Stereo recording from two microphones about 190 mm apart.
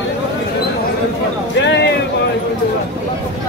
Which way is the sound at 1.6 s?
65° left (ahead or behind).